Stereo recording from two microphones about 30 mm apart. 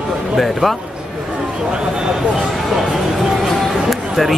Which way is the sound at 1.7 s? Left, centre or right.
Right.